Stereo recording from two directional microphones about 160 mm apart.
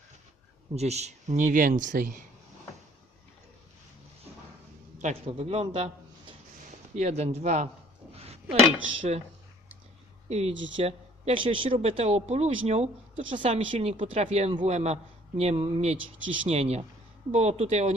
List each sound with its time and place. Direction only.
0.8 s speech: 45° right (ahead or behind)
5.0 s speech: 40° right (ahead or behind)
9.0 s speech: 40° right (ahead or behind)
10.2 s speech: 40° right (ahead or behind)